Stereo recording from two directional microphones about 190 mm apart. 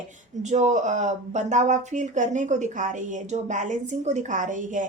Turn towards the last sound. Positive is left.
turn(degrees=-40)  # may be behind; listen again after turning